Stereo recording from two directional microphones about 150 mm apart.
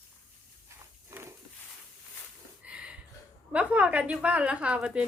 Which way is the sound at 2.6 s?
5° right (ahead or behind).